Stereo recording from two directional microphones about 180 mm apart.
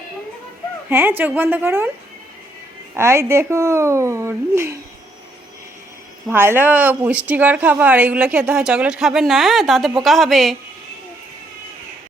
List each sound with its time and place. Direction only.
0.9 s speech: 10° right (ahead or behind)
2.9 s speech: 15° right (ahead or behind)
6.2 s speech: 15° right (ahead or behind)